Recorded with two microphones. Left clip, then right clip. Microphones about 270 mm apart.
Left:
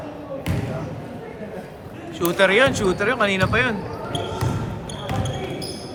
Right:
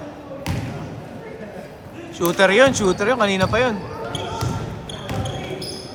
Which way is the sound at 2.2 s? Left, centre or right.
Right.